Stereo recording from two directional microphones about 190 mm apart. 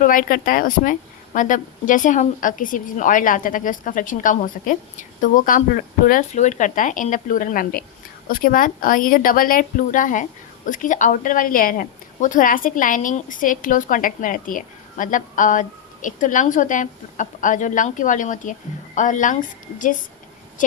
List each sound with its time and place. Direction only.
0.0 s a woman's voice: 45° left (ahead or behind)
20.6 s speech: 45° left (ahead or behind)